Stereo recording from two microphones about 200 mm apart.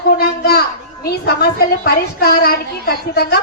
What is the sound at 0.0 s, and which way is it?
Children playing, 50° left (ahead or behind).